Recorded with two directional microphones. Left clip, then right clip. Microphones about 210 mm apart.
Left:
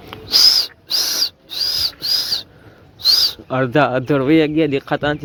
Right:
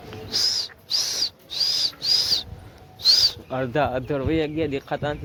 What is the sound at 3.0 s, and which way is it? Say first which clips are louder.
Speech: left 3 dB; 15° left (ahead or behind).